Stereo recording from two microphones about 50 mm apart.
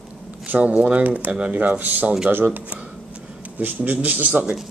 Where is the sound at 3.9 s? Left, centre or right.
Right.